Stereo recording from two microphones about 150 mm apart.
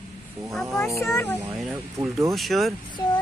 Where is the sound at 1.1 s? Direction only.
20° left (ahead or behind).